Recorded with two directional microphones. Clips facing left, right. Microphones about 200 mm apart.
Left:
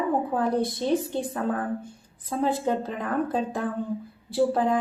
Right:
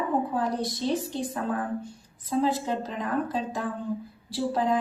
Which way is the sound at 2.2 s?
55° left (ahead or behind).